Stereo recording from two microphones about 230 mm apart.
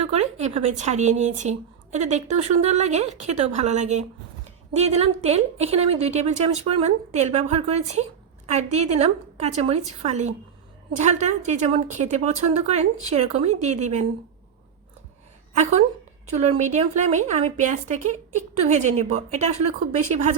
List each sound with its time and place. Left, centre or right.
0.0 s a woman's voice: right
16.2 s a woman's voice: right